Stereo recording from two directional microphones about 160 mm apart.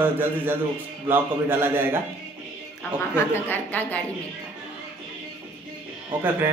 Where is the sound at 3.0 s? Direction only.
10° left (ahead or behind).